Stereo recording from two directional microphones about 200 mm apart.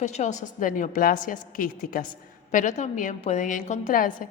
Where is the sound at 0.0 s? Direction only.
35° left (ahead or behind).